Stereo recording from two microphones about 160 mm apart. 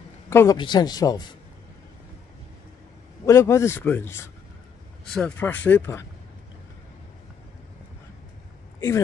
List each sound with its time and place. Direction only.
0.3 s a man's voice: 15° left (ahead or behind)
0.6 s speech: 25° left (ahead or behind)
3.3 s speech: 20° left (ahead or behind)
5.0 s speech: 5° left (ahead or behind)
8.7 s a sound: 20° left (ahead or behind)